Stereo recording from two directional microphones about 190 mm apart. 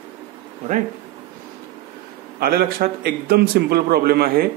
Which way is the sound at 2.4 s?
50° right (ahead or behind).